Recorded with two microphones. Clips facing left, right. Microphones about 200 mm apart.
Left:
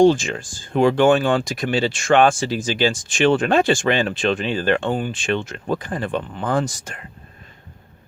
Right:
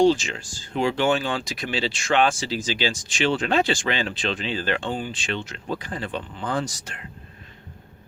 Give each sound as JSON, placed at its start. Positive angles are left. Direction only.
{"t": 0.0, "sound": "speech", "side_deg": 50}